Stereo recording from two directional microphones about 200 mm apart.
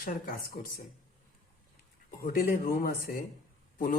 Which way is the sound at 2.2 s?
45° left (ahead or behind).